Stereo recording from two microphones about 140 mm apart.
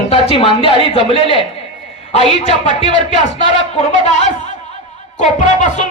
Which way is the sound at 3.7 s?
50° left (ahead or behind).